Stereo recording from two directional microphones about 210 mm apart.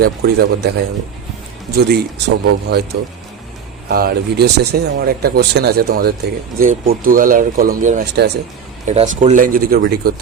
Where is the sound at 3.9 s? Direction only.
45° right (ahead or behind).